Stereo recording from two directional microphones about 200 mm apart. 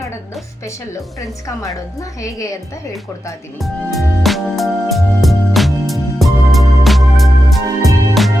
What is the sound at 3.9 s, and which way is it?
Music, centre (ahead or behind).